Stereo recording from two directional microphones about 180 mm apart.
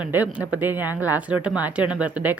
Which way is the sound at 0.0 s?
10° right (ahead or behind).